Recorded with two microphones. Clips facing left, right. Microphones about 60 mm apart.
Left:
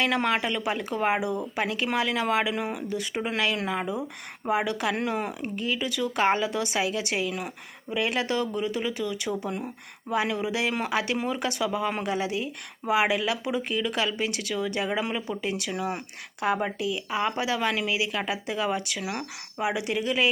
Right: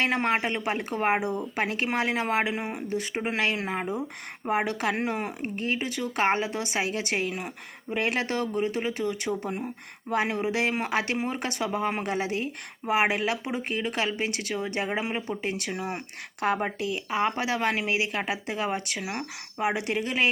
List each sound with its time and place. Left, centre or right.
0.0 s speech: right